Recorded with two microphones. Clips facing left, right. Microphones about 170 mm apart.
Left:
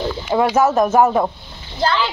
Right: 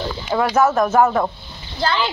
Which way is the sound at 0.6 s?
20° left (ahead or behind).